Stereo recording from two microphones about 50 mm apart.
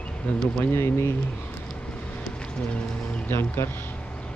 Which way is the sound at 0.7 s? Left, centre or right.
Left.